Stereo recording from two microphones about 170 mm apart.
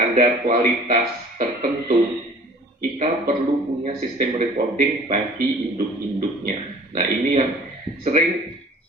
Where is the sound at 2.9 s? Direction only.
40° right (ahead or behind).